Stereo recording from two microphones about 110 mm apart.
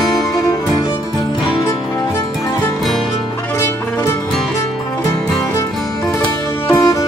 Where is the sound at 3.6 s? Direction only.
25° left (ahead or behind).